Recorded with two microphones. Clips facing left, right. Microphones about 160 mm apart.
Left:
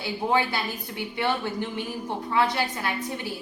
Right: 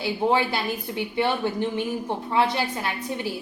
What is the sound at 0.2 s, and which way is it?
Speech, 25° right (ahead or behind).